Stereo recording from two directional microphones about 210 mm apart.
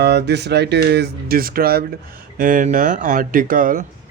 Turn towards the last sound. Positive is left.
turn(degrees=-40)  # may be behind; listen again after turning